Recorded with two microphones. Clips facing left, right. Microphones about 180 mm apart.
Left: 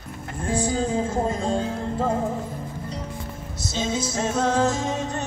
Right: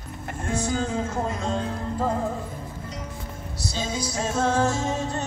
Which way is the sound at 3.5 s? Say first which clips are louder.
Left 3 dB; 20° left (ahead or behind).